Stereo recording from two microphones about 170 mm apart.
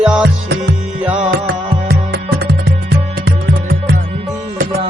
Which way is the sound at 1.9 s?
65° right (ahead or behind).